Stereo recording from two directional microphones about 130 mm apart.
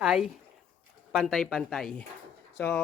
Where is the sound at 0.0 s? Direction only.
5° right (ahead or behind).